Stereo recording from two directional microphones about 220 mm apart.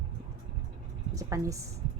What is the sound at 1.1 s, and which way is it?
Speech, 15° right (ahead or behind).